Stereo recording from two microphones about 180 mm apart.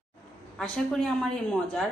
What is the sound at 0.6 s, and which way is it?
Speech, 5° left (ahead or behind).